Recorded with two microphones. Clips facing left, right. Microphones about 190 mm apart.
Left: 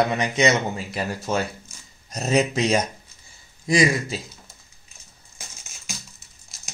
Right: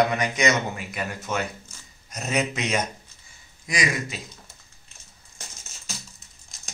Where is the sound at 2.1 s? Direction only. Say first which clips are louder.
Left 5 dB; 35° left (ahead or behind).